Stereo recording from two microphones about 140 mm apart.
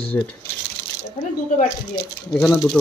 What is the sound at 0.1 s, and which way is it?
Speech, 15° left (ahead or behind).